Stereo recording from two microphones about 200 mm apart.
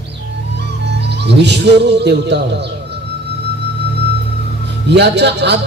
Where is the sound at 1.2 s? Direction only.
60° right (ahead or behind).